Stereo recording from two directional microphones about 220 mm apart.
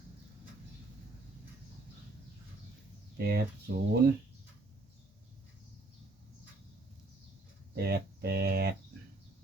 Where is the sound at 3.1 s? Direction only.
45° right (ahead or behind).